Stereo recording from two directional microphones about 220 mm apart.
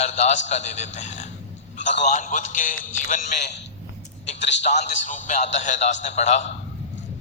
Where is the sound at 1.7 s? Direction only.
55° left (ahead or behind).